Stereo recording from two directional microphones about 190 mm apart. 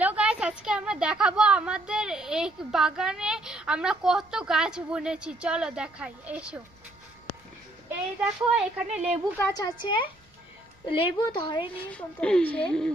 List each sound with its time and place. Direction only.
0.0 s a woman's voice: 5° right (ahead or behind)
7.9 s a woman's voice: 5° right (ahead or behind)
9.4 s a woman's voice: 20° left (ahead or behind)
11.9 s a woman's voice: 5° left (ahead or behind)